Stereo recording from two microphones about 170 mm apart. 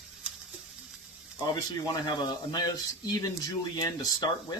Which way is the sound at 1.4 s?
25° left (ahead or behind).